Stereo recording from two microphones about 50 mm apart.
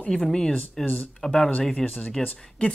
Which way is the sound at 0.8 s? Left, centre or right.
Left.